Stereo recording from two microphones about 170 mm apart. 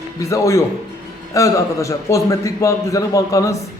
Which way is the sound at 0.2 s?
20° left (ahead or behind).